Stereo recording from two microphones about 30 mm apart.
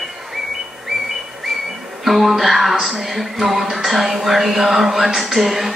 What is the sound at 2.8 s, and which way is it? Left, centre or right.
Music, centre.